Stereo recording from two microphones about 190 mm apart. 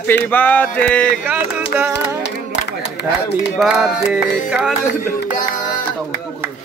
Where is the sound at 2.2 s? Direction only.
65° left (ahead or behind).